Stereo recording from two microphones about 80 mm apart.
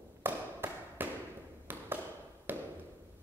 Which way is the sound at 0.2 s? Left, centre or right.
Right.